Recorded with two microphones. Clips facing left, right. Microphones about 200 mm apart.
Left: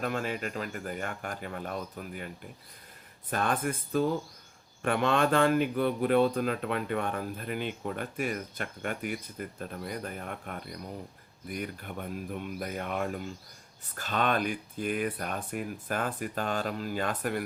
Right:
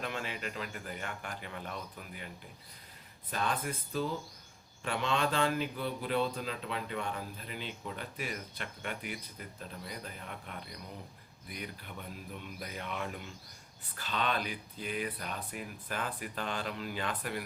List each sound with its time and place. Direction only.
0.0 s a man's voice: 45° left (ahead or behind)